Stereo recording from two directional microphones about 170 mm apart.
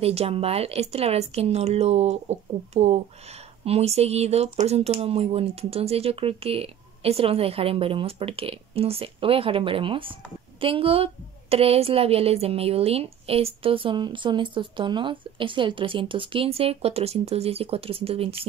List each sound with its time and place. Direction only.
0.0 s a woman's voice: 35° right (ahead or behind)